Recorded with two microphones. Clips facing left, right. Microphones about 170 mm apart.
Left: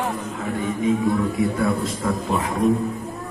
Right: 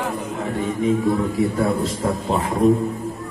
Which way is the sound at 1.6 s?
30° right (ahead or behind).